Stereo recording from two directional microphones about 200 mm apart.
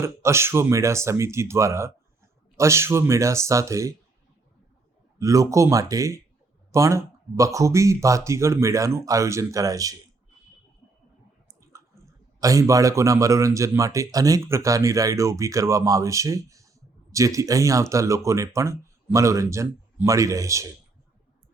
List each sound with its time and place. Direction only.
0.0 s speech: 15° right (ahead or behind)
5.2 s speech: 15° right (ahead or behind)
12.4 s speech: 15° right (ahead or behind)